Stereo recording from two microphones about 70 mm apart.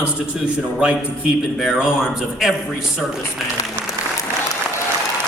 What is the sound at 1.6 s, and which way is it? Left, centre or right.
Speech, centre.